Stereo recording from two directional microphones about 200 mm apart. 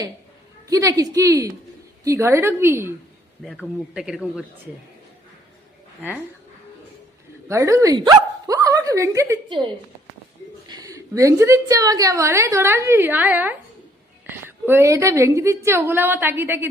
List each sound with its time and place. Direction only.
0.7 s a woman's voice: 15° right (ahead or behind)
3.4 s speech: centre (ahead or behind)
7.4 s speech: 15° right (ahead or behind)
9.5 s a woman's voice: 25° right (ahead or behind)